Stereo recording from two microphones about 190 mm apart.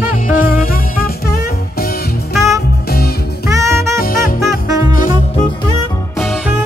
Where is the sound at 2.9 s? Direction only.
55° left (ahead or behind).